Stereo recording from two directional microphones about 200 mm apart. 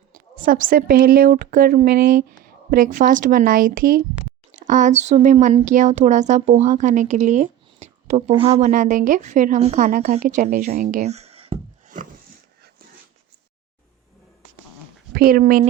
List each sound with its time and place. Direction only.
0.1 s a woman's voice: 45° right (ahead or behind)
15.1 s speech: 45° right (ahead or behind)